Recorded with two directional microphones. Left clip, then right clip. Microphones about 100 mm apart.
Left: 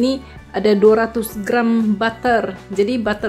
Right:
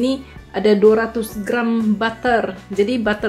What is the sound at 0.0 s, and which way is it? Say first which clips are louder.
Speech: left 1 dB; 60° left (ahead or behind).